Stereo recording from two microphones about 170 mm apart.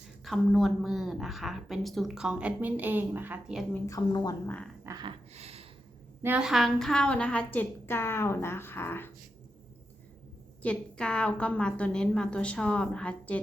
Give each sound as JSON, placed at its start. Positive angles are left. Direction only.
{"t": 0.3, "sound": "a woman's voice", "side_deg": 0}
{"t": 3.8, "sound": "speech", "side_deg": 20}
{"t": 4.4, "sound": "a woman's voice", "side_deg": 10}
{"t": 4.8, "sound": "a sound", "side_deg": -20}
{"t": 5.0, "sound": "a sound", "side_deg": -35}
{"t": 6.2, "sound": "a woman's voice", "side_deg": -5}
{"t": 10.6, "sound": "a woman's voice", "side_deg": 5}